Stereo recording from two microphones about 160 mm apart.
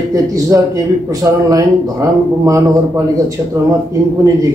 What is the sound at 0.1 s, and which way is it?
Speech, 20° right (ahead or behind).